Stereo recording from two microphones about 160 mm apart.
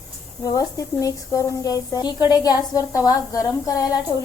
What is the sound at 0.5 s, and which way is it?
A woman's voice, 20° left (ahead or behind).